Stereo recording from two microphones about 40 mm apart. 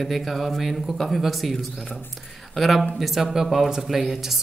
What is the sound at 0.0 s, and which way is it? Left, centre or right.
Speech, centre.